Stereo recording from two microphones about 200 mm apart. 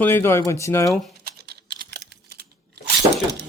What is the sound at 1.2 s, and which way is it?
Typing, 50° right (ahead or behind).